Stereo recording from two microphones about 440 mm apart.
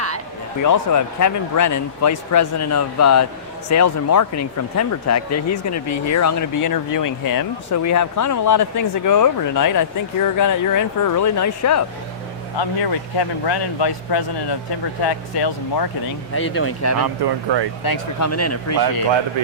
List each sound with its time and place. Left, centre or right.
0.6 s speech: left
12.5 s speech: left
16.6 s speech: left
17.0 s speech: right
17.8 s speech: left